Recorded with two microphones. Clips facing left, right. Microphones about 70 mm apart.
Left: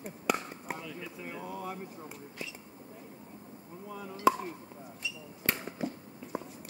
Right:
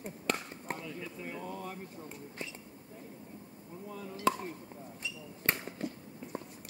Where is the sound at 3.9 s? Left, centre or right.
Centre.